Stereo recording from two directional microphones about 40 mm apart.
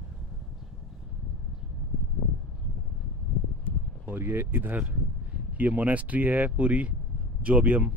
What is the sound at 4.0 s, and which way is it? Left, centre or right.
Speech, right.